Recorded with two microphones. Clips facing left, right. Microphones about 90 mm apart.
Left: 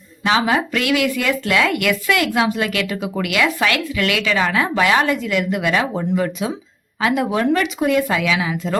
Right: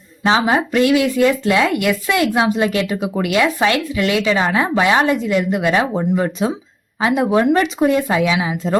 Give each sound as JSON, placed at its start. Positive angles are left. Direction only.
{"t": 0.3, "sound": "speech", "side_deg": -25}